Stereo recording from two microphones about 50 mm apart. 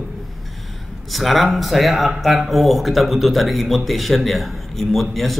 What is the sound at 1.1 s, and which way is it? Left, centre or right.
A man's voice, centre.